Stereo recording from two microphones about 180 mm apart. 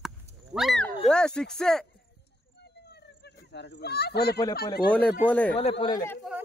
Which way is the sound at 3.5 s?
75° left (ahead or behind).